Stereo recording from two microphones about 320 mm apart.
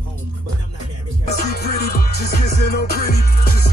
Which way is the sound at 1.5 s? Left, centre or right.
Left.